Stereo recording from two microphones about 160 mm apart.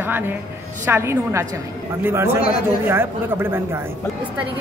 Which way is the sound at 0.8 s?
15° right (ahead or behind).